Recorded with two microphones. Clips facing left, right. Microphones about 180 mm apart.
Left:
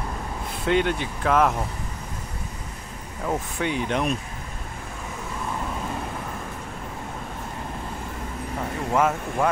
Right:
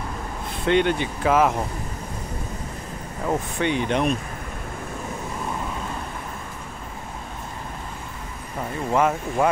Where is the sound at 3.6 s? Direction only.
5° left (ahead or behind).